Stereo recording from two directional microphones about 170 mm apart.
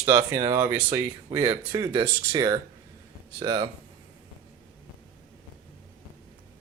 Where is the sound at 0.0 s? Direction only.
15° right (ahead or behind).